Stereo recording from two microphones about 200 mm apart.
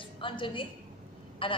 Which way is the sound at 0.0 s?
25° left (ahead or behind).